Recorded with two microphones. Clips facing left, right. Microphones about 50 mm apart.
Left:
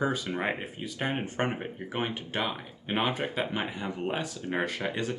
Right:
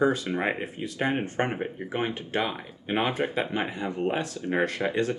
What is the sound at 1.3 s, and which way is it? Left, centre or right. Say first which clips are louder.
Speech: right 2 dB; centre.